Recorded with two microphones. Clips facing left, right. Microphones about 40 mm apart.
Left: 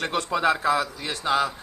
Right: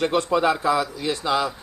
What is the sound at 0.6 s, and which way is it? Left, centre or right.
Speech, left.